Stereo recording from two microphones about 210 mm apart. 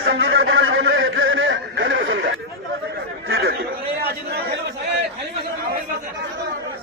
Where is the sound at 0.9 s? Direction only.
70° right (ahead or behind).